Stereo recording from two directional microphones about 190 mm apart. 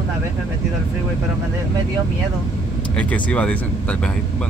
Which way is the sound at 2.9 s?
5° left (ahead or behind).